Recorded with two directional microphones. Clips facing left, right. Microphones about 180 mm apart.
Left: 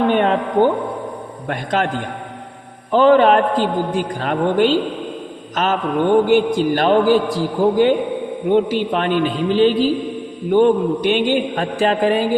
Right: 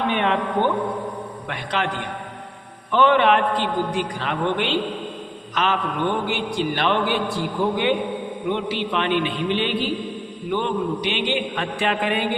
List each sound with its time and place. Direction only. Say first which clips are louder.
0.1 s a man's voice: left 5 dB; 40° left (ahead or behind)